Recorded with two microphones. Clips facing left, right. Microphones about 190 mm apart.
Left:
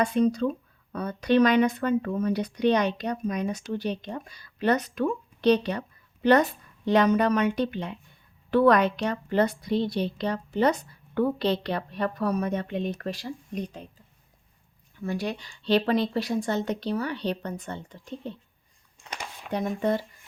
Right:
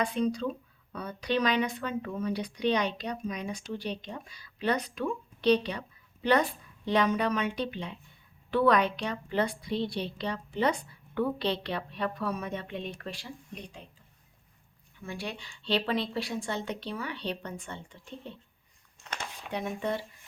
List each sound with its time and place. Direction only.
0.0 s a woman's voice: 50° left (ahead or behind)
15.0 s speech: 40° left (ahead or behind)
19.5 s a woman's voice: 40° left (ahead or behind)